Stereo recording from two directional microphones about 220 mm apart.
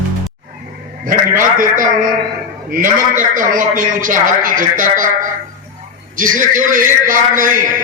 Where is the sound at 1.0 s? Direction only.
35° right (ahead or behind).